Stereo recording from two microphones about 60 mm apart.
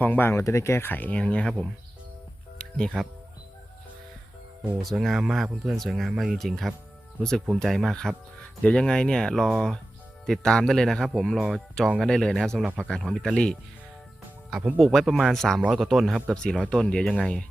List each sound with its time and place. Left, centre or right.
0.0 s speech: left
0.3 s speech: left; by 1.5 s centre
2.6 s music: centre
4.8 s speech: centre
8.6 s speech: centre
13.3 s speech: centre
14.8 s speech: centre
15.3 s speech: centre
16.3 s speech: centre